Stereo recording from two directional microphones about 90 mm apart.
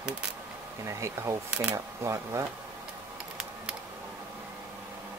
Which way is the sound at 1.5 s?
10° right (ahead or behind).